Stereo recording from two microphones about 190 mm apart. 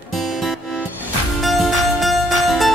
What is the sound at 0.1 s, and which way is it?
Music, centre (ahead or behind).